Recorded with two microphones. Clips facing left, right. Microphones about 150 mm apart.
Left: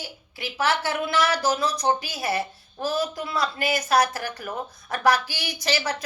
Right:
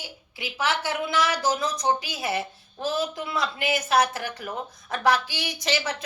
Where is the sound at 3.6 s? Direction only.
40° left (ahead or behind).